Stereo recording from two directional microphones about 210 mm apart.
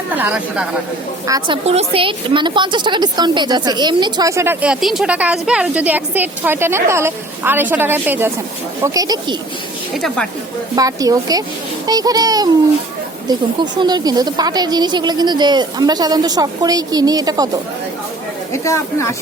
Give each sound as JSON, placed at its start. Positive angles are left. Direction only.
{"t": 0.2, "sound": "speech", "side_deg": -5}
{"t": 1.3, "sound": "a woman's voice", "side_deg": -25}
{"t": 9.9, "sound": "speech", "side_deg": 0}
{"t": 10.8, "sound": "a woman's voice", "side_deg": -15}
{"t": 13.7, "sound": "a woman's voice", "side_deg": -20}
{"t": 18.5, "sound": "speech", "side_deg": 15}